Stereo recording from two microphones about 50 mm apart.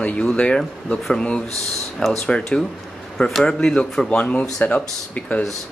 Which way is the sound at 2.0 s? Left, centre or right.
Left.